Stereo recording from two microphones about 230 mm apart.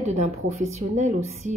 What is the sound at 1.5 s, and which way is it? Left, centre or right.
Music, right.